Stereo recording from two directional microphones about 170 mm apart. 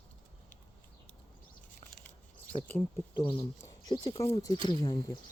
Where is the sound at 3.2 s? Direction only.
25° left (ahead or behind).